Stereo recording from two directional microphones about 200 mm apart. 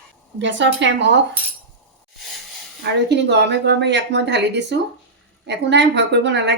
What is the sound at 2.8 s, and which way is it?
A woman's voice, 60° right (ahead or behind).